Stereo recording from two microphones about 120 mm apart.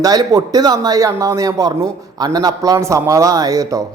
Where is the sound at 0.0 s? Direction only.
30° right (ahead or behind).